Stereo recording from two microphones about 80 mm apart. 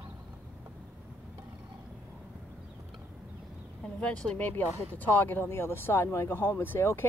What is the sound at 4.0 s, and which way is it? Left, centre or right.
Speech, centre.